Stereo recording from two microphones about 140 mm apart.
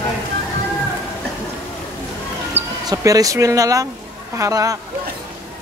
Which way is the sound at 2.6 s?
55° right (ahead or behind).